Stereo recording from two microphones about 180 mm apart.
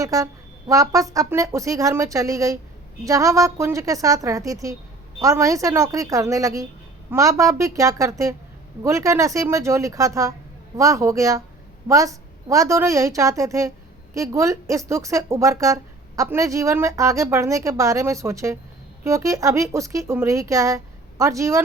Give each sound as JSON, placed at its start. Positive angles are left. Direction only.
{"t": 0.0, "sound": "a woman's voice", "side_deg": -20}